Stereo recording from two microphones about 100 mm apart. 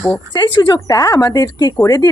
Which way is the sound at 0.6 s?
40° left (ahead or behind).